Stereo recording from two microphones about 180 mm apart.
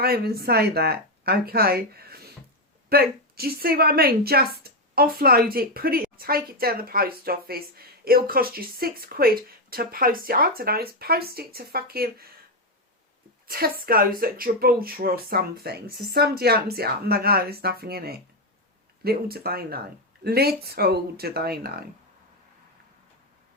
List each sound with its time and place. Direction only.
0.0 s a woman's voice: 60° right (ahead or behind)
13.5 s a woman's voice: 55° right (ahead or behind)